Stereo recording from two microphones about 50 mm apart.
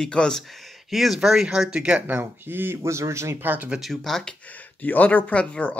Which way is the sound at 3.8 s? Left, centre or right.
Centre.